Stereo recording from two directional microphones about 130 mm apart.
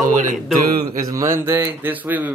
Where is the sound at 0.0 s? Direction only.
80° right.